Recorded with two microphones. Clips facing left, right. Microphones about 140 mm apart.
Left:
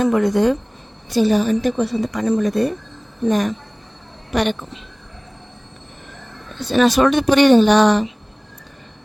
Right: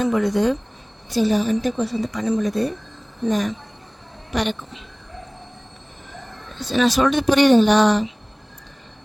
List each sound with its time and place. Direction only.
0.0 s a woman's voice: 55° left (ahead or behind)
1.1 s a woman's voice: 70° left (ahead or behind)
6.6 s a woman's voice: 60° left (ahead or behind)